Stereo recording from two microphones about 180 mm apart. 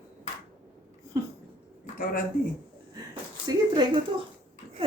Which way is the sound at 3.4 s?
25° right (ahead or behind).